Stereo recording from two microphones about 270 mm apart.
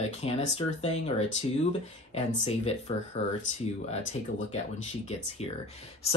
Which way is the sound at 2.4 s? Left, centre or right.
Left.